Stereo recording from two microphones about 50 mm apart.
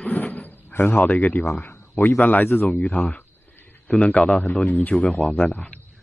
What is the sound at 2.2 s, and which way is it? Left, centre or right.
A man's voice, left.